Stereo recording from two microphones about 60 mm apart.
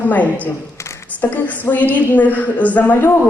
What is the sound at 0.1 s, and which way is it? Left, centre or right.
A woman's voice, left.